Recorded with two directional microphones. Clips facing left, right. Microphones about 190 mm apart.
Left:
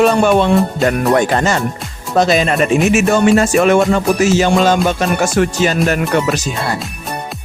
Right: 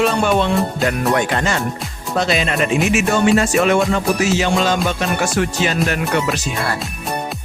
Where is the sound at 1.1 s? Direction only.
40° left (ahead or behind).